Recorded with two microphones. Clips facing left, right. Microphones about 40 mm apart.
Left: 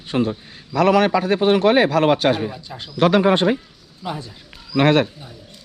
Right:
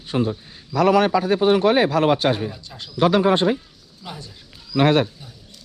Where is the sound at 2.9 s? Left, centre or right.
Left.